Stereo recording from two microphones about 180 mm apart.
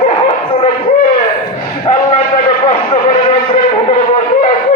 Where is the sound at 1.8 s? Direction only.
35° left (ahead or behind).